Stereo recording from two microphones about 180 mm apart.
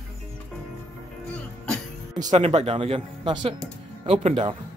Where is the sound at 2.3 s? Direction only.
35° right (ahead or behind).